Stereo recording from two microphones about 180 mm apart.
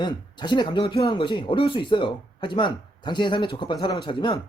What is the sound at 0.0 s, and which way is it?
Speech, 25° left (ahead or behind).